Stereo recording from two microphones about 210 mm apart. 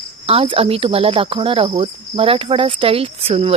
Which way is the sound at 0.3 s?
25° right (ahead or behind).